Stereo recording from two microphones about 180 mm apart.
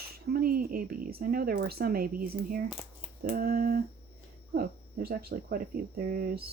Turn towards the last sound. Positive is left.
turn(degrees=-55)  # may be behind; listen again after turning